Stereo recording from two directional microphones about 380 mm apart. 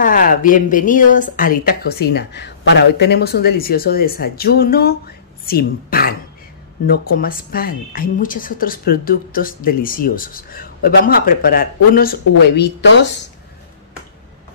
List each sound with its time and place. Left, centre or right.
0.0 s a woman's voice: left